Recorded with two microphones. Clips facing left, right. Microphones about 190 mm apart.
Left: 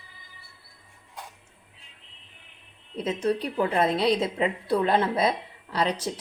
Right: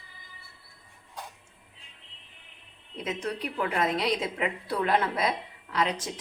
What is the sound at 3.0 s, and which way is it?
A woman's voice, 30° left (ahead or behind).